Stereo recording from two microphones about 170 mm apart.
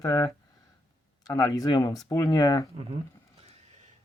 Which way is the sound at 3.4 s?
45° right (ahead or behind).